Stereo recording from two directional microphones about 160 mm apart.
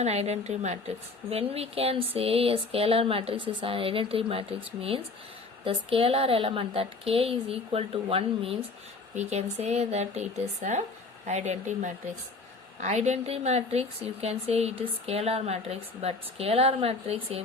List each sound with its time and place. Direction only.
0.0 s a woman's voice: 40° right (ahead or behind)